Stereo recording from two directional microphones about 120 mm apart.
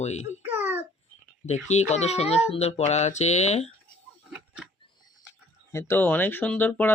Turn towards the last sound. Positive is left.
turn(degrees=15)  # may be behind; listen again after turning